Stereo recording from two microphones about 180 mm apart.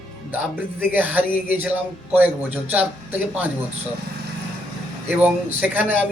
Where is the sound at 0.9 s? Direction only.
10° right (ahead or behind).